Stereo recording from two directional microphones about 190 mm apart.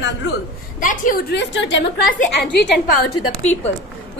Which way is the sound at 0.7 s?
45° left (ahead or behind).